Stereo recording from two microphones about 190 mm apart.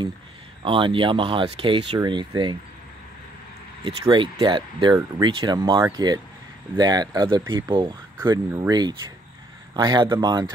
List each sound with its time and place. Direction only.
0.7 s speech: 25° right (ahead or behind)
3.8 s speech: 25° right (ahead or behind)